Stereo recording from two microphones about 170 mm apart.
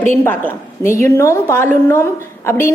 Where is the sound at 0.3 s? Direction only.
15° left (ahead or behind).